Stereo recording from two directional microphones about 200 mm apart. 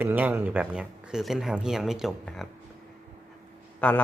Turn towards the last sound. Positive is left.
turn(degrees=5)  # may be behind; listen again after turning